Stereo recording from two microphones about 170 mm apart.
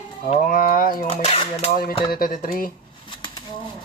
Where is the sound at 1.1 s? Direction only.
35° left (ahead or behind).